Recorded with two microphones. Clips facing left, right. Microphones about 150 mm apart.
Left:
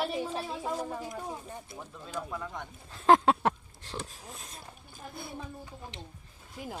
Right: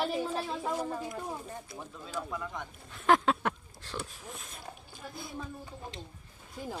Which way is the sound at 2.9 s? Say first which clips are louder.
Left 3 dB; 30° left (ahead or behind).